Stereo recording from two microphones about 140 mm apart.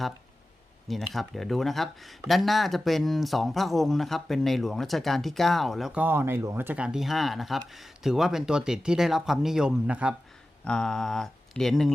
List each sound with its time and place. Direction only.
0.9 s speech: centre (ahead or behind)
6.0 s speech: 15° right (ahead or behind)
10.6 s speech: 5° left (ahead or behind)